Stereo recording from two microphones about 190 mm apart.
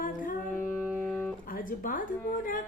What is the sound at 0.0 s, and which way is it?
Music, 45° left (ahead or behind).